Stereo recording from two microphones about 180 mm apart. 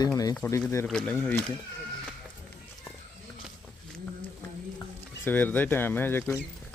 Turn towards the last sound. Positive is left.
turn(degrees=5)  # may be behind; listen again after turning